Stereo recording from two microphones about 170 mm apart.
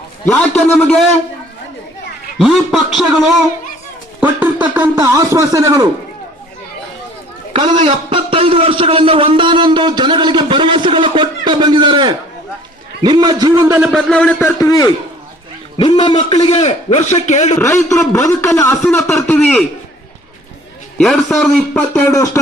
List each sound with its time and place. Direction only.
0.3 s speech: 5° left (ahead or behind)
2.4 s speech: centre (ahead or behind)
4.2 s a sound: 10° right (ahead or behind)
7.5 s a man's voice: 30° right (ahead or behind)
13.7 s speech: centre (ahead or behind)
14.4 s a man's voice: 20° left (ahead or behind); by 17.6 s 45° left (ahead or behind)
17.6 s a man's voice: 15° left (ahead or behind)
21.0 s speech: centre (ahead or behind)
22.1 s a man's voice: 20° left (ahead or behind)